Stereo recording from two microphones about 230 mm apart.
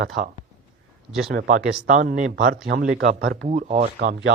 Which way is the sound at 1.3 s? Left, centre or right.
Right.